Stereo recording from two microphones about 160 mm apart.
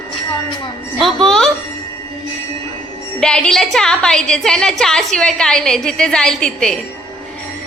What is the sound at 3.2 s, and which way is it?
A woman's voice, 5° left (ahead or behind).